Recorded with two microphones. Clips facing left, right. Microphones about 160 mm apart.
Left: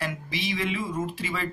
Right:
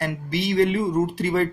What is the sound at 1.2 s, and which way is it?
Speech, 55° right (ahead or behind).